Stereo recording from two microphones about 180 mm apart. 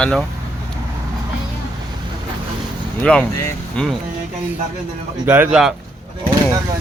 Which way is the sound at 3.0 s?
5° left (ahead or behind).